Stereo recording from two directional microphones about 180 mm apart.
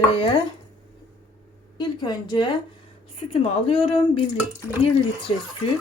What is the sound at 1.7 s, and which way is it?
A woman's voice, 25° left (ahead or behind).